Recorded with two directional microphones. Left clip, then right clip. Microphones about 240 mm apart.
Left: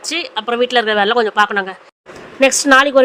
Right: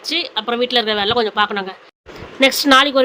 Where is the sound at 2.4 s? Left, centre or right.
Centre.